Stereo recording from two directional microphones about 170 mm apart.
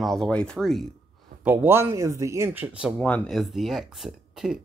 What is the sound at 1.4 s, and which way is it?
Speech, 10° right (ahead or behind).